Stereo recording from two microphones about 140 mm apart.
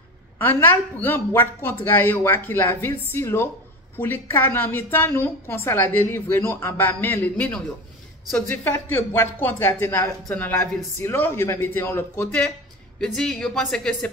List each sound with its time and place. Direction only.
0.4 s a woman's voice: 15° left (ahead or behind)
12.3 s a woman's voice: 5° left (ahead or behind)